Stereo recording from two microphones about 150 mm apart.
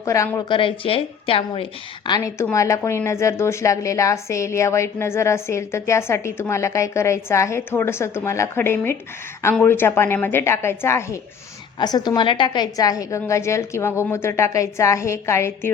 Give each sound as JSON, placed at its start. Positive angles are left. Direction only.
{"t": 0.0, "sound": "speech", "side_deg": 20}
{"t": 0.3, "sound": "speech", "side_deg": 30}
{"t": 2.0, "sound": "a woman's voice", "side_deg": 25}